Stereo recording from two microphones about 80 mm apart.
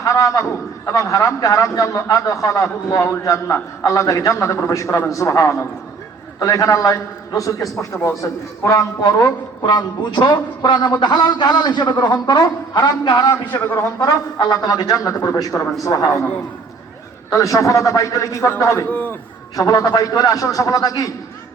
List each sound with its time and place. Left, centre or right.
0.0 s a man's voice: left
13.7 s a man's voice: left
17.3 s a man's voice: left
18.9 s a man's voice: left
19.5 s a man's voice: left